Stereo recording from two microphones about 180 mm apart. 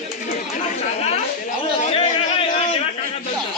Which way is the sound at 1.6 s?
30° left (ahead or behind).